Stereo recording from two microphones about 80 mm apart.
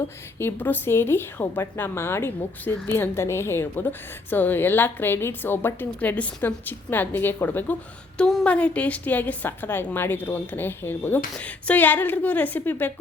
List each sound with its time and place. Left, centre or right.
0.3 s a woman's voice: left